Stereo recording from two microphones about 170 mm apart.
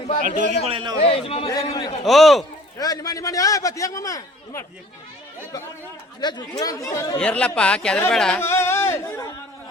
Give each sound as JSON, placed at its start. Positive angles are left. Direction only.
{"t": 0.2, "sound": "a man's voice", "side_deg": -50}
{"t": 0.7, "sound": "a man's voice", "side_deg": -30}
{"t": 1.0, "sound": "a man's voice", "side_deg": 35}
{"t": 2.0, "sound": "a man's voice", "side_deg": 0}
{"t": 2.7, "sound": "a man's voice", "side_deg": 20}
{"t": 6.1, "sound": "a man's voice", "side_deg": 25}
{"t": 7.2, "sound": "speech", "side_deg": 5}
{"t": 8.4, "sound": "speech", "side_deg": 15}